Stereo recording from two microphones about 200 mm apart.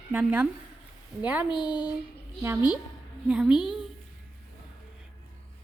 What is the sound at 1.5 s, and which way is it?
Speech, 25° left (ahead or behind).